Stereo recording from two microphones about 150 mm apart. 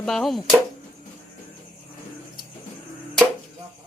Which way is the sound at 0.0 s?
Centre (ahead or behind).